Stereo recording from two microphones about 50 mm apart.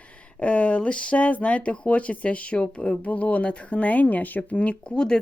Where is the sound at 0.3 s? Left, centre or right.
Left.